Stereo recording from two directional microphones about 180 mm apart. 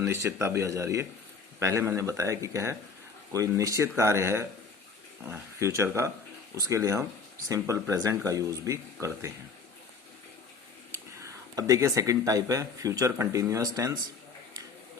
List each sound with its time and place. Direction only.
0.0 s speech: 15° right (ahead or behind)
10.9 s speech: 20° right (ahead or behind)